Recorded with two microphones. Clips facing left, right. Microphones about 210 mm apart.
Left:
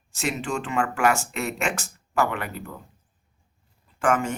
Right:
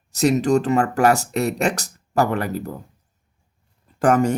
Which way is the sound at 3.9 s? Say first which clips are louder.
Right 6 dB; 40° right (ahead or behind).